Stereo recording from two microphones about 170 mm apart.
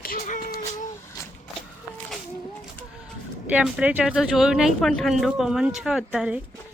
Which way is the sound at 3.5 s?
5° right (ahead or behind).